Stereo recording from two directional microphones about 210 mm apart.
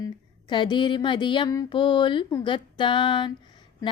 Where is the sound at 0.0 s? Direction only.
20° left (ahead or behind).